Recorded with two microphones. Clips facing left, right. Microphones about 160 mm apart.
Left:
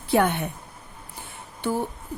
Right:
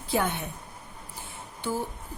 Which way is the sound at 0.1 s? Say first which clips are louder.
Left 6 dB; 65° left (ahead or behind).